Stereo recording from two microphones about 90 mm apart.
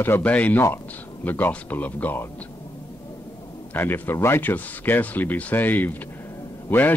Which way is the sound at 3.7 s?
25° left (ahead or behind).